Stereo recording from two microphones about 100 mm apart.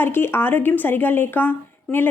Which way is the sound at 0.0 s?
20° left (ahead or behind).